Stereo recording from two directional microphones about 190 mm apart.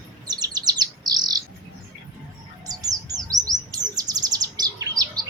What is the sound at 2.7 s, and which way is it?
Chirp, 20° right (ahead or behind).